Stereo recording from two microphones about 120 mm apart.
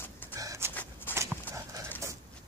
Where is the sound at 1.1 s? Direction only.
20° right (ahead or behind).